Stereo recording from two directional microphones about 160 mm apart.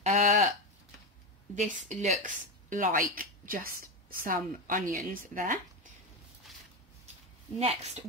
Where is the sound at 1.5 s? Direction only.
50° right (ahead or behind).